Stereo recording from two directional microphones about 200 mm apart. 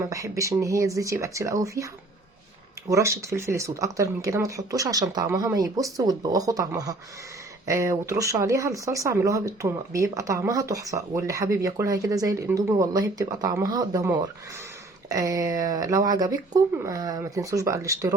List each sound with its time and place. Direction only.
0.0 s speech: 15° right (ahead or behind)